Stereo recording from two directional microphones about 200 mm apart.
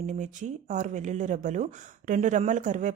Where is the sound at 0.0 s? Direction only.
40° right (ahead or behind).